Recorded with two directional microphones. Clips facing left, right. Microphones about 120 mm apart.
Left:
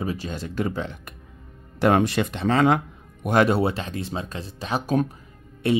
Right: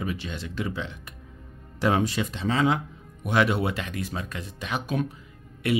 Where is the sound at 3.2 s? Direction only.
45° left (ahead or behind).